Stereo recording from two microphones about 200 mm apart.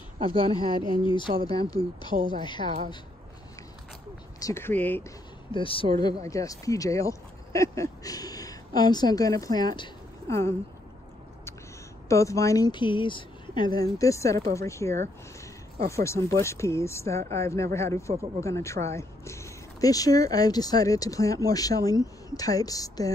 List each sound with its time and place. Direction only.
0.2 s speech: 25° right (ahead or behind)
1.0 s speech: 25° left (ahead or behind)
1.8 s speech: 30° right (ahead or behind)
2.4 s speech: 20° left (ahead or behind)
4.4 s speech: 15° left (ahead or behind)
5.5 s speech: 25° left (ahead or behind)
12.1 s speech: 15° left (ahead or behind)